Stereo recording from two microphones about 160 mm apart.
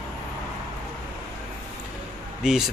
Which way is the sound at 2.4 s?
5° right (ahead or behind).